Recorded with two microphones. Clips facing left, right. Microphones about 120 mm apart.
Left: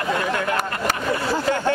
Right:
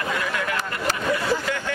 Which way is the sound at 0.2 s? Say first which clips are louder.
Left 4 dB; 35° left (ahead or behind).